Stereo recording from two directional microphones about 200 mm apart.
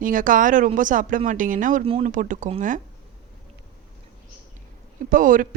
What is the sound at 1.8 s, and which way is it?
Speech, 25° right (ahead or behind).